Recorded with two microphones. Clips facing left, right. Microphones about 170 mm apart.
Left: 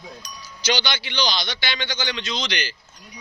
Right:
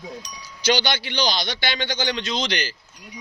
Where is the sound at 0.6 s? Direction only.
50° right (ahead or behind).